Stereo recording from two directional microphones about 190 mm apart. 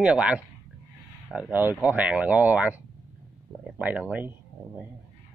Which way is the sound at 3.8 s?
10° right (ahead or behind).